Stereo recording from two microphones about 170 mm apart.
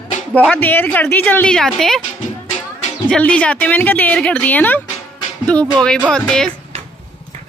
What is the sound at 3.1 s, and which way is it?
A woman's voice, 5° left (ahead or behind).